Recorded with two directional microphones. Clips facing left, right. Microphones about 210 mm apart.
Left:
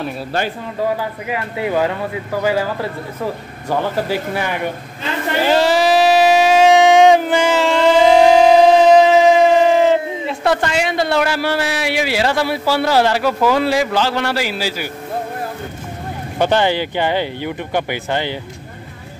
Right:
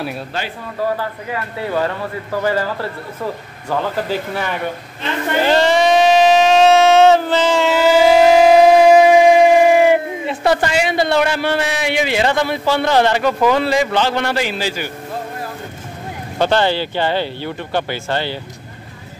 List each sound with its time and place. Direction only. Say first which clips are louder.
1.3 s speech: left 3 dB; 15° left (ahead or behind)
5.4 s a sound: even; 5° left (ahead or behind)
7.6 s siren: even; 5° right (ahead or behind)
10.2 s a man's voice: right 1 dB; centre (ahead or behind)
16.3 s speech: even; 15° left (ahead or behind)